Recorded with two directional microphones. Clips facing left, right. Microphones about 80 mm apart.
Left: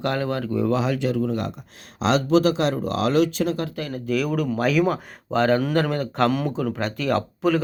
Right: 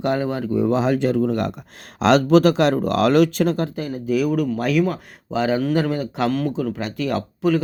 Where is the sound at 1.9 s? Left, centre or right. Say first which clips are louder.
Right 5 dB; right.